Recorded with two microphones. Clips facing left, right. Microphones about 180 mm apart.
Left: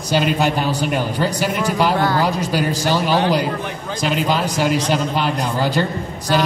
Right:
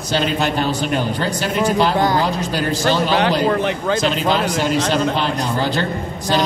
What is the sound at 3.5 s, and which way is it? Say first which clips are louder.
Speech: right 7 dB; 75° right (ahead or behind).